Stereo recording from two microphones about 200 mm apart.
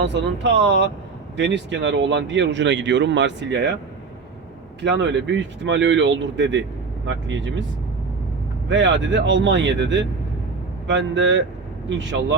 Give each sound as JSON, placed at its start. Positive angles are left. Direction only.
{"t": 0.0, "sound": "speech", "side_deg": -60}
{"t": 4.8, "sound": "speech", "side_deg": -60}
{"t": 8.7, "sound": "speech", "side_deg": -65}